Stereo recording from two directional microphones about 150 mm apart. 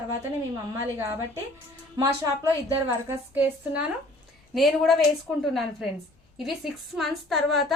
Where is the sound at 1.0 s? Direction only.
20° right (ahead or behind).